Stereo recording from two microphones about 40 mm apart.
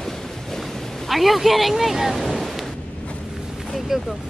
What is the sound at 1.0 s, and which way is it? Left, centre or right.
Speech, centre.